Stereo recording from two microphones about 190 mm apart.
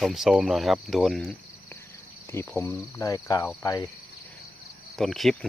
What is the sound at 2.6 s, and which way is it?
Speech, 15° left (ahead or behind).